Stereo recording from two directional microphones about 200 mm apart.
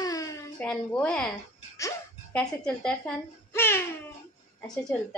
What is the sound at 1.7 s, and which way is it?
Music, 15° left (ahead or behind).